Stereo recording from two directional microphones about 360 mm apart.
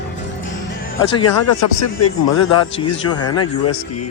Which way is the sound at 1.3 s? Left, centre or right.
Left.